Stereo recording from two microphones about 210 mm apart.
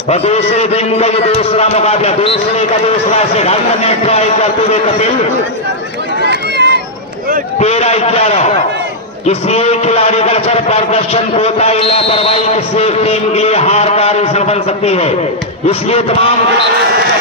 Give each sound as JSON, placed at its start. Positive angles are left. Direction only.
{"t": 0.1, "sound": "a man's voice", "side_deg": 30}
{"t": 6.2, "sound": "run", "side_deg": -55}
{"t": 7.6, "sound": "a man's voice", "side_deg": 30}